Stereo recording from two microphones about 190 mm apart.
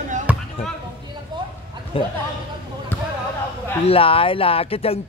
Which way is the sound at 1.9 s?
30° left (ahead or behind).